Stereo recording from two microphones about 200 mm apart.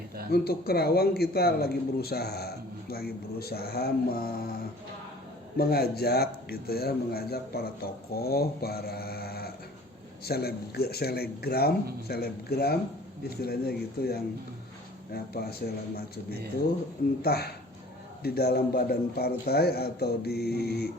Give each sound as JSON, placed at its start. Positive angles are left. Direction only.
{"t": 0.3, "sound": "speech", "side_deg": 50}
{"t": 5.5, "sound": "speech", "side_deg": 50}
{"t": 17.2, "sound": "speech", "side_deg": 50}